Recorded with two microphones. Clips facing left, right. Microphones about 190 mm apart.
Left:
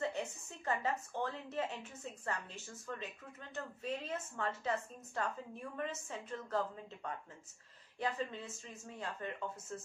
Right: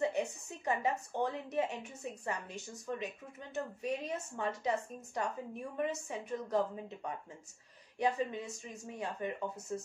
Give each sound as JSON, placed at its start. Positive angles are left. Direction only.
{"t": 0.5, "sound": "speech", "side_deg": -15}